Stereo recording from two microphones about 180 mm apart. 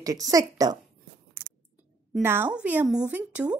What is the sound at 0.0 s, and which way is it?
Speech, 20° right (ahead or behind).